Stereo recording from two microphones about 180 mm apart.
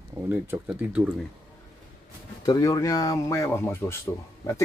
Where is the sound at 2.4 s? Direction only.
20° left (ahead or behind).